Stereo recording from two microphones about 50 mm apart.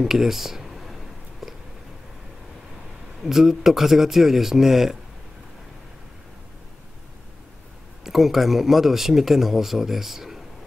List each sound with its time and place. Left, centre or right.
0.0 s speech: centre
1.4 s a sound: centre
3.2 s speech: centre
8.0 s speech: centre